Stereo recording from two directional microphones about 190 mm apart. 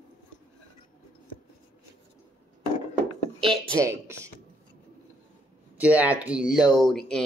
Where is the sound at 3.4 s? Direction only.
15° right (ahead or behind).